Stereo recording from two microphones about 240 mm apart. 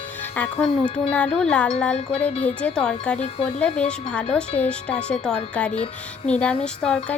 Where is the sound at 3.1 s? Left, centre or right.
Left.